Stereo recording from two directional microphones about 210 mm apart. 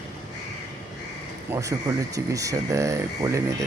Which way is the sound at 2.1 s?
15° right (ahead or behind).